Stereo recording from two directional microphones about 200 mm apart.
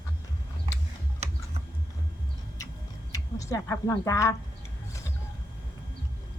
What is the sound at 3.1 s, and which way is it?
Speech, 15° left (ahead or behind).